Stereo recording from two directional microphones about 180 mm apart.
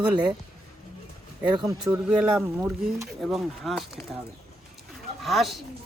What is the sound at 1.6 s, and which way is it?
Speech, 20° right (ahead or behind).